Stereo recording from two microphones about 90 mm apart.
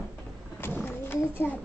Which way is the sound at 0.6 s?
25° left (ahead or behind).